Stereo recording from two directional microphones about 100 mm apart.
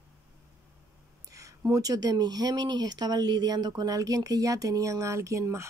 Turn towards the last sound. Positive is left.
turn(degrees=-30)  # may be behind; listen again after turning